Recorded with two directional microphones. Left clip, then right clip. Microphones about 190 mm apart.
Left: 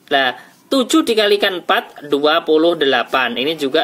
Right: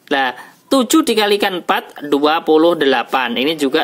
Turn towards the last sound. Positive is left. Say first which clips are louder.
# right 1 dB
turn(degrees=-40)  # may be behind; listen again after turning